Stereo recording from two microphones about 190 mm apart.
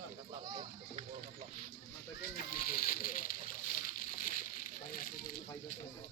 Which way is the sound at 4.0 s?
45° left (ahead or behind).